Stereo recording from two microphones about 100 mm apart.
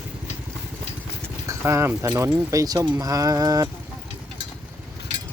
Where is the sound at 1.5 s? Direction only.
30° right (ahead or behind).